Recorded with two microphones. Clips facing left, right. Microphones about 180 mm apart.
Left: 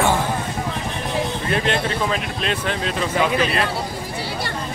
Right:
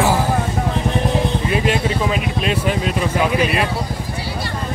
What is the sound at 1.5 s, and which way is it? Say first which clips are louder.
Speech: right 1 dB; 10° right (ahead or behind).